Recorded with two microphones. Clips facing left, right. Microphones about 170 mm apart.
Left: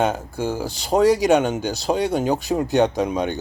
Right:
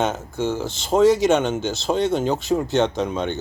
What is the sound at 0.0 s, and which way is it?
Speech, 10° left (ahead or behind).